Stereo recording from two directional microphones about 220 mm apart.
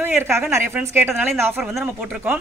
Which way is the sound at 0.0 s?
10° right (ahead or behind).